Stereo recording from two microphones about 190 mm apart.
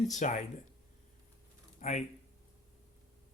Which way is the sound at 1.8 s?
40° left (ahead or behind).